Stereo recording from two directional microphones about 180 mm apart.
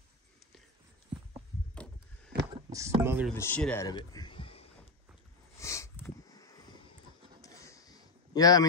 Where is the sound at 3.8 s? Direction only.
20° left (ahead or behind).